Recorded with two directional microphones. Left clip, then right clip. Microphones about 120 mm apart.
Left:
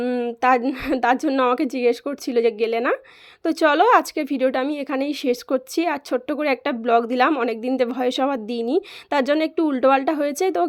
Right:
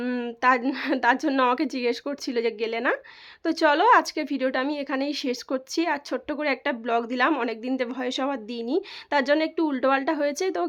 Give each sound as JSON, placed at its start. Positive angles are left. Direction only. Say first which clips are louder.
{"t": 0.0, "sound": "a sound", "louder": "left 6 dB", "side_deg": 20}
{"t": 0.6, "sound": "a woman's voice", "louder": "left 2 dB", "side_deg": 20}
{"t": 1.3, "sound": "a woman's voice", "louder": "left 3 dB", "side_deg": 20}